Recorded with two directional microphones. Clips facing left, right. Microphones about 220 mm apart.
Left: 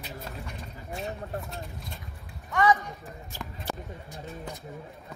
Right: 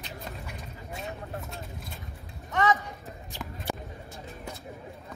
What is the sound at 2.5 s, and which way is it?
Speech, 25° right (ahead or behind).